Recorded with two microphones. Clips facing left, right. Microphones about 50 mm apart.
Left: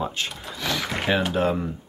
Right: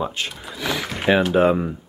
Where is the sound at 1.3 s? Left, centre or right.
Right.